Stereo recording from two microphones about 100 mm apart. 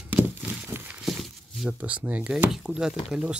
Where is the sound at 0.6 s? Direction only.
20° right (ahead or behind).